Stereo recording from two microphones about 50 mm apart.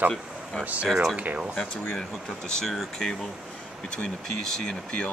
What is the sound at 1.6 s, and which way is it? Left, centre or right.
Speech, centre.